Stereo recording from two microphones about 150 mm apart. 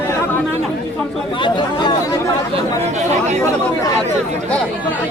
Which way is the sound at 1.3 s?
35° left (ahead or behind).